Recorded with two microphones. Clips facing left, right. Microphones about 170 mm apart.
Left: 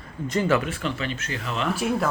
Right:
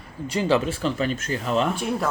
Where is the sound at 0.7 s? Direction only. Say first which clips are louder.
Right 4 dB; 40° right (ahead or behind).